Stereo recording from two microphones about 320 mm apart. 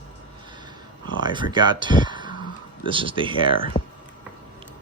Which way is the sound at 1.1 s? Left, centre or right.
Centre.